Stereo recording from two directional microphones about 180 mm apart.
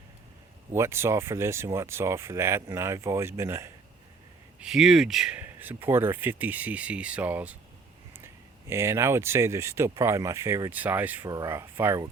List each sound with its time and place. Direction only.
0.7 s speech: 15° right (ahead or behind)
4.6 s speech: 5° right (ahead or behind)